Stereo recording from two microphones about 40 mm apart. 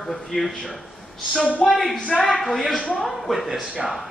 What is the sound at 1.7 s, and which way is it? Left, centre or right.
A woman's voice, centre.